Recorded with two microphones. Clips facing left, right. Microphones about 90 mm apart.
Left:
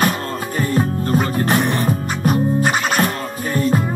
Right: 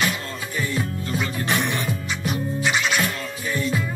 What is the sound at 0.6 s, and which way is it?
Music, 45° left (ahead or behind).